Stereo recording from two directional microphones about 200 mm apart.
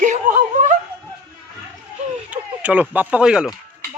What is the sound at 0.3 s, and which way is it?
Snicker, 45° right (ahead or behind).